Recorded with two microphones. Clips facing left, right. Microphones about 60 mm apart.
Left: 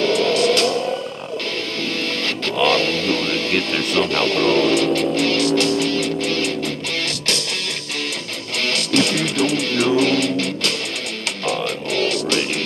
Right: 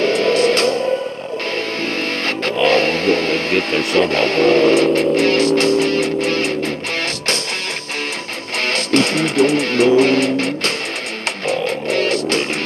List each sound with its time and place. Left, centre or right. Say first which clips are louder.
0.0 s music: right 2 dB; right
2.2 s music: right 2 dB; right
8.5 s music: right 3 dB; right